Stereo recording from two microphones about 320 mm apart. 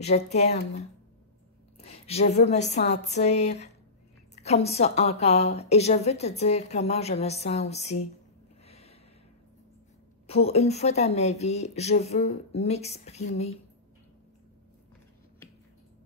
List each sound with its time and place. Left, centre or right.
0.0 s speech: left
8.6 s a sound: centre
10.2 s speech: centre